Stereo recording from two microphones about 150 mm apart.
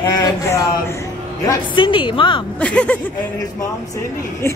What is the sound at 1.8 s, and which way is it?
Speech, 35° left (ahead or behind).